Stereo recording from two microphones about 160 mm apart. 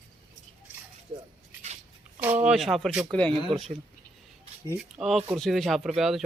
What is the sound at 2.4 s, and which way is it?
Speech, 5° right (ahead or behind).